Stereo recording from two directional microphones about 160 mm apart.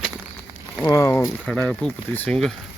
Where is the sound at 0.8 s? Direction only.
20° left (ahead or behind).